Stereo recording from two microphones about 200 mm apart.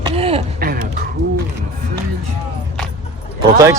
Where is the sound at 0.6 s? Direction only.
45° right (ahead or behind).